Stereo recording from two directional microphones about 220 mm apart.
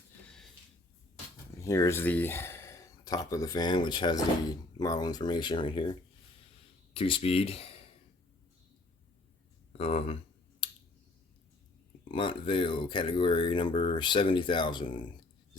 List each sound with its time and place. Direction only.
1.5 s speech: 15° left (ahead or behind)
9.7 s speech: 25° left (ahead or behind)
10.6 s a sound: 25° left (ahead or behind)
12.1 s speech: 25° left (ahead or behind)